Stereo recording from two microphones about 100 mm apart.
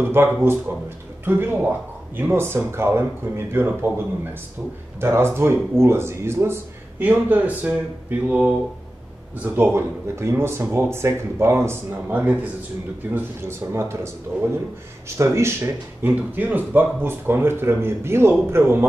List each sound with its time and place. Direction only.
0.0 s speech: 20° right (ahead or behind)